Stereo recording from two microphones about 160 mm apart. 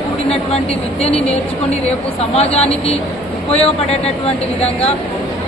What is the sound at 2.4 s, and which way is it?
A man's voice, 40° left (ahead or behind).